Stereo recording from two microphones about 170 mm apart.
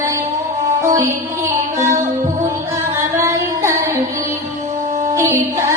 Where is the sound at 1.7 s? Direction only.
15° right (ahead or behind).